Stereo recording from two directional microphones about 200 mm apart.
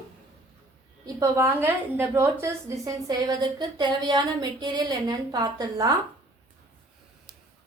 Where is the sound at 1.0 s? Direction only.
15° right (ahead or behind).